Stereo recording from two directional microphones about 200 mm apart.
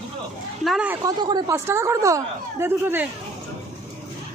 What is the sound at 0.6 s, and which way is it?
Speech, 5° right (ahead or behind).